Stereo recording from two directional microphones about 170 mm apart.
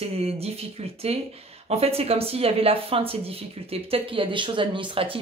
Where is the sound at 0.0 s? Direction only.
35° right (ahead or behind).